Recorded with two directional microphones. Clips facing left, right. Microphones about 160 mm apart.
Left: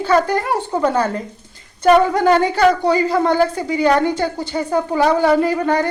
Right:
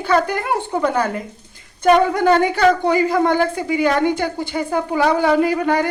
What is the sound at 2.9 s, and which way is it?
Speech, 15° right (ahead or behind).